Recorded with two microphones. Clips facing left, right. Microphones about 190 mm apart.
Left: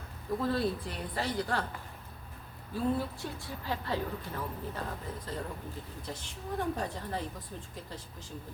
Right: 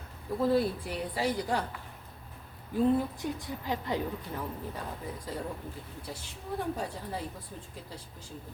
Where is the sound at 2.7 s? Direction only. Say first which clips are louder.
Right 5 dB; 15° right (ahead or behind).